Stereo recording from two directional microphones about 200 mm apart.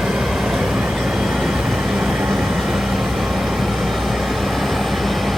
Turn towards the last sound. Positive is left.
turn(degrees=0)  # may be behind; listen again after turning